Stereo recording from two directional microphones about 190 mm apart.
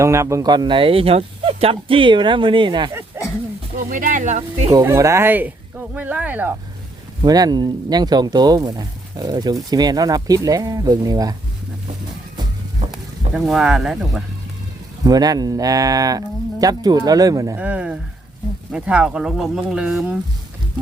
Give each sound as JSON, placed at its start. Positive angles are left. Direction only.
{"t": 0.0, "sound": "speech", "side_deg": -15}
{"t": 3.2, "sound": "dog", "side_deg": -10}
{"t": 3.8, "sound": "speech", "side_deg": -45}
{"t": 4.7, "sound": "speech", "side_deg": -20}
{"t": 7.2, "sound": "speech", "side_deg": -20}
{"t": 12.9, "sound": "speech", "side_deg": 0}
{"t": 15.0, "sound": "speech", "side_deg": -20}